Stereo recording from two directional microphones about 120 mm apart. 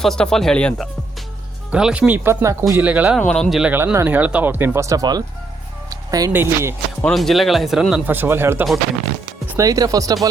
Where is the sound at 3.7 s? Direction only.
20° right (ahead or behind).